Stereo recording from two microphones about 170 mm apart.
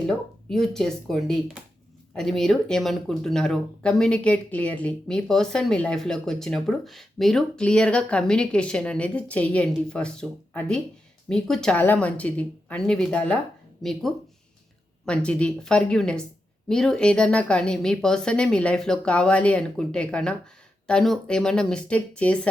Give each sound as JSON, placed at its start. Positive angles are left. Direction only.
{"t": 0.1, "sound": "speech", "side_deg": 0}
{"t": 15.0, "sound": "speech", "side_deg": 5}